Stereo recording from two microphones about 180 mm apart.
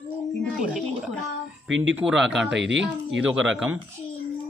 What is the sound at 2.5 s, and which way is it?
Speech, 85° right.